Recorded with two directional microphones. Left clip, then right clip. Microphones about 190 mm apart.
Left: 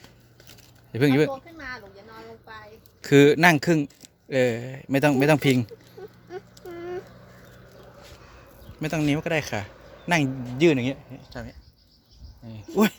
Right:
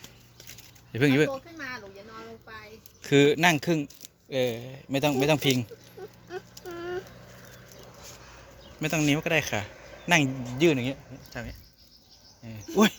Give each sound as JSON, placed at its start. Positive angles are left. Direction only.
{"t": 0.9, "sound": "speech", "side_deg": 15}
{"t": 1.5, "sound": "a sound", "side_deg": -50}
{"t": 3.0, "sound": "speech", "side_deg": 25}
{"t": 6.2, "sound": "a sound", "side_deg": 30}
{"t": 8.8, "sound": "speech", "side_deg": 10}
{"t": 10.6, "sound": "speech", "side_deg": 30}
{"t": 12.7, "sound": "speech", "side_deg": 10}